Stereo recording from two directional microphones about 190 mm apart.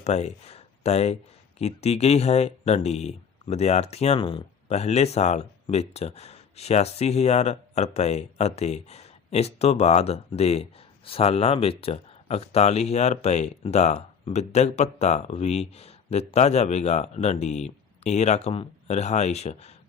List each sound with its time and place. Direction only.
0.0 s speech: 35° left (ahead or behind)